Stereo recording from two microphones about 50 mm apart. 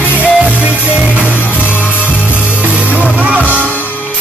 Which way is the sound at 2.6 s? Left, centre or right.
Right.